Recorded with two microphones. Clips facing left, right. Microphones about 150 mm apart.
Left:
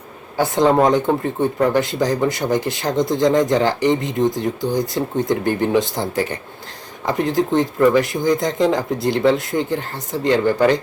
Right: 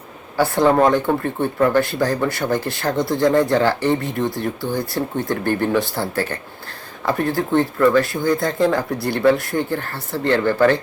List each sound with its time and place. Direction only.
0.3 s speech: 20° left (ahead or behind)